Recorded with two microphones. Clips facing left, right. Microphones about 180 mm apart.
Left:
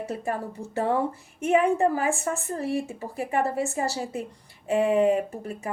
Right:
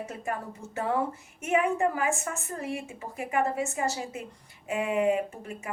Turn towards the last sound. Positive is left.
turn(degrees=35)  # may be behind; listen again after turning